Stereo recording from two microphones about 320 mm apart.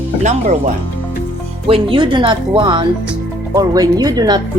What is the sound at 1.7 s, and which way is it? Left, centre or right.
Speech, centre.